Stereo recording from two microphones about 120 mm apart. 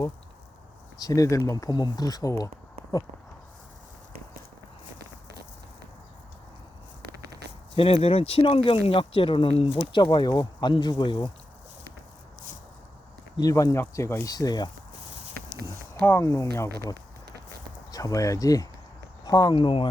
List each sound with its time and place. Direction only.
1.0 s speech: 30° left (ahead or behind)
7.8 s speech: 55° left (ahead or behind)
13.3 s speech: 30° left (ahead or behind)
14.3 s speech: 35° left (ahead or behind)
16.0 s speech: 20° left (ahead or behind)
17.9 s speech: 30° left (ahead or behind)
19.5 s speech: 45° left (ahead or behind)